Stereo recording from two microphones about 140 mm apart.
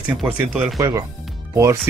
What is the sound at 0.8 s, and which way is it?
A man's voice, 20° right (ahead or behind).